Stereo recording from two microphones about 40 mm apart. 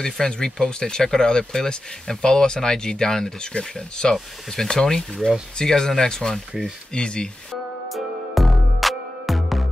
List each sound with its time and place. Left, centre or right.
0.0 s speech: centre
7.9 s music: centre